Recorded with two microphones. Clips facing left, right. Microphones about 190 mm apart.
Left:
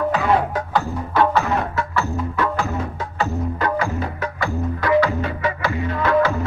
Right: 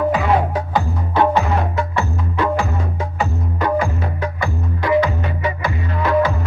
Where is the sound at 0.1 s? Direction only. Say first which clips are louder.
Right 1 dB; 10° right (ahead or behind).